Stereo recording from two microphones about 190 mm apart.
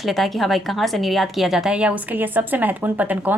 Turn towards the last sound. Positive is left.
turn(degrees=-10)  # may be behind; listen again after turning